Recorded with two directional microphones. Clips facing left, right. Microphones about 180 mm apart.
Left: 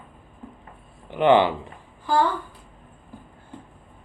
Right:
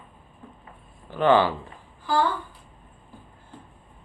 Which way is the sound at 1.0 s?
20° left (ahead or behind).